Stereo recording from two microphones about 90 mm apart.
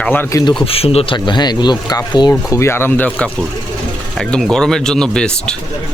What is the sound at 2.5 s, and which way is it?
Speech, 30° left (ahead or behind).